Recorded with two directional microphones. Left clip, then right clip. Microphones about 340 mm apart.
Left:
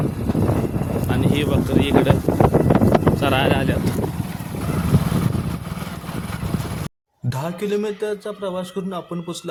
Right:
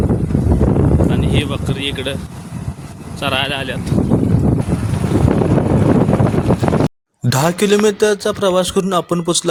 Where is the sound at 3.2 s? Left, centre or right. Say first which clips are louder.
Right 1 dB; centre.